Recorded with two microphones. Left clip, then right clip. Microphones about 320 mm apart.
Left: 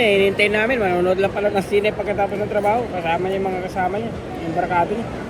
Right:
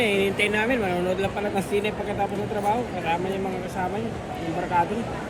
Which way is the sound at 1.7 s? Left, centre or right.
Centre.